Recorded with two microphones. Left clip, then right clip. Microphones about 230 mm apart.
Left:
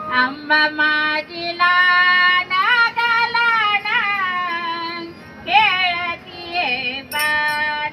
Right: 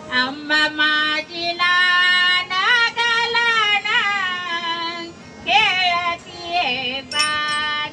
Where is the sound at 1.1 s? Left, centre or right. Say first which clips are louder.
Even; right.